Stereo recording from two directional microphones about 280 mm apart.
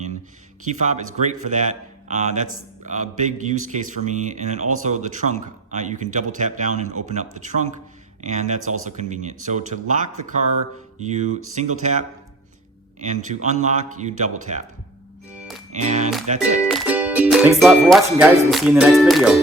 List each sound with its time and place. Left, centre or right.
0.7 s speech: right
15.4 s music: centre
15.7 s speech: right
16.6 s music: centre